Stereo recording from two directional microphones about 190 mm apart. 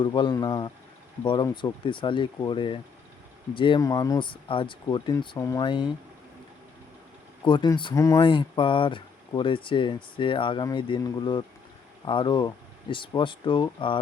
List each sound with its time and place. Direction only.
0.0 s speech: 25° left (ahead or behind)
7.4 s speech: 25° left (ahead or behind)